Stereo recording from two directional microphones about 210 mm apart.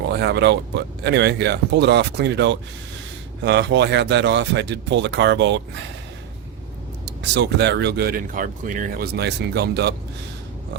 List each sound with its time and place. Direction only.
0.1 s speech: 55° right (ahead or behind)
7.0 s speech: 55° right (ahead or behind)